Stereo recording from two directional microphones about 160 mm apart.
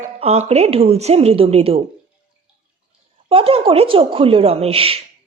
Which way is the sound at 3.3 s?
35° right (ahead or behind).